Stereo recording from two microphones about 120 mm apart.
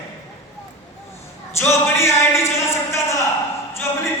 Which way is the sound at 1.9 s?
20° left (ahead or behind).